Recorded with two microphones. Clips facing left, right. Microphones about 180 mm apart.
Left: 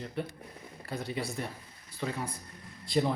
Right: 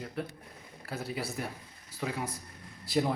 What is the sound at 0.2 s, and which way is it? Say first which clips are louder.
A man's voice: left 1 dB; centre (ahead or behind).